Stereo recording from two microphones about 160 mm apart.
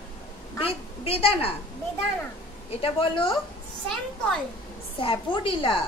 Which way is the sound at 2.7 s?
35° left (ahead or behind).